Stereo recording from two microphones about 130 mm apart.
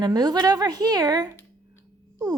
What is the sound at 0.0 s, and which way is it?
A woman's voice, 30° right (ahead or behind).